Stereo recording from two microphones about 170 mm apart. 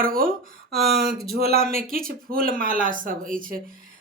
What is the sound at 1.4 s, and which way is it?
Speech, 40° left (ahead or behind).